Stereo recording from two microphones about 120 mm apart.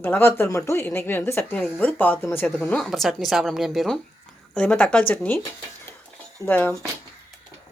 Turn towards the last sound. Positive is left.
turn(degrees=15)  # may be behind; listen again after turning